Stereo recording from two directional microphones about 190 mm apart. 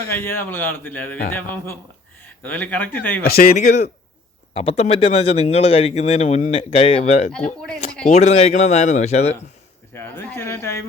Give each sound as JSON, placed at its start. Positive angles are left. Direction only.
{"t": 0.1, "sound": "speech", "side_deg": 10}
{"t": 2.2, "sound": "a man's voice", "side_deg": 10}
{"t": 3.3, "sound": "speech", "side_deg": 45}
{"t": 7.3, "sound": "speech", "side_deg": 5}
{"t": 8.0, "sound": "speech", "side_deg": 35}
{"t": 9.9, "sound": "speech", "side_deg": 10}